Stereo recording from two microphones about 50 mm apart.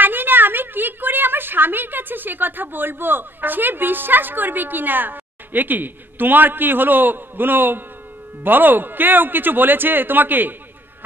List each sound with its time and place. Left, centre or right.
0.0 s a woman's voice: right